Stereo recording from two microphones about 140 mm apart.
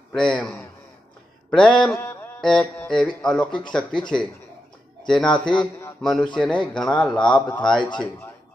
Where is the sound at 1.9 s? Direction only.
15° left (ahead or behind).